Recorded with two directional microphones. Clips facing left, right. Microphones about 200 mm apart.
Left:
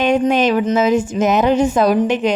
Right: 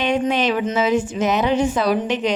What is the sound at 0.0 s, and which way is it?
Speech, 45° left (ahead or behind).